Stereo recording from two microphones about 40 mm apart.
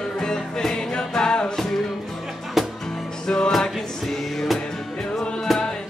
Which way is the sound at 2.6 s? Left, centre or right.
Centre.